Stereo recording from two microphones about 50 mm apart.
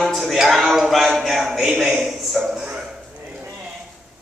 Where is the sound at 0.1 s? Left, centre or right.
Centre.